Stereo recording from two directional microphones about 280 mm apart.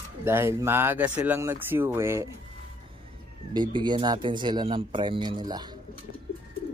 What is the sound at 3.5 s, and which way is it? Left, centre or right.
Speech, centre.